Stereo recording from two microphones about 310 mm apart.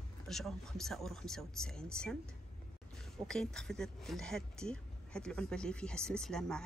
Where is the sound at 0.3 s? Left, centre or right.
Centre.